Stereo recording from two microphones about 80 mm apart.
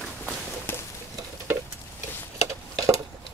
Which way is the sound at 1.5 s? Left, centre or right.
Right.